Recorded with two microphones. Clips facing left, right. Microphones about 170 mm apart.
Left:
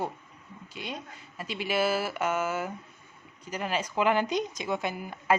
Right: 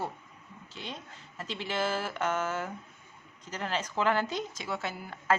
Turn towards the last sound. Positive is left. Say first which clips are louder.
# left 3 dB
turn(degrees=15)  # may be behind; listen again after turning